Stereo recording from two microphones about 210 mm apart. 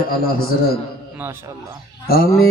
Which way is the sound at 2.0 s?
45° left (ahead or behind).